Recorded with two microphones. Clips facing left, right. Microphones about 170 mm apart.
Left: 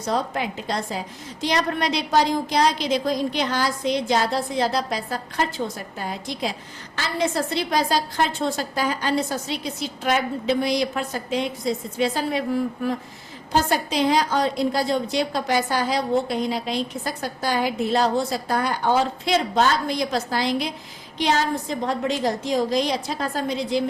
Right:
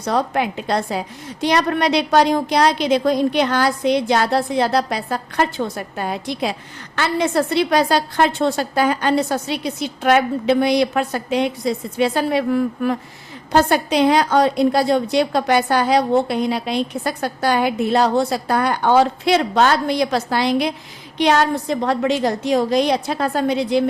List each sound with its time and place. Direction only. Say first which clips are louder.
0.0 s a woman's voice: right 5 dB; 65° right (ahead or behind)